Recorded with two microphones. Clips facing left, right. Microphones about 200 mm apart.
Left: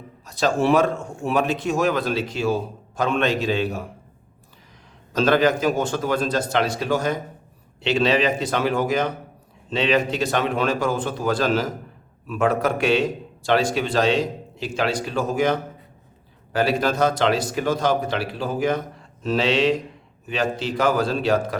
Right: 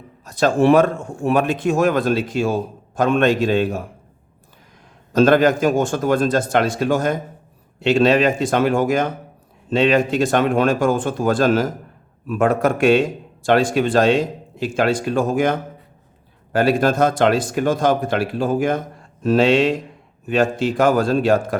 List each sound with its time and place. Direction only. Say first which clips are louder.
0.3 s a man's voice: right 5 dB; 55° right (ahead or behind)
5.1 s a man's voice: right 5 dB; 50° right (ahead or behind)